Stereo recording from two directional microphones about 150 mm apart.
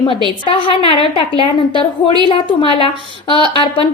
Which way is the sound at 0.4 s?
35° left (ahead or behind).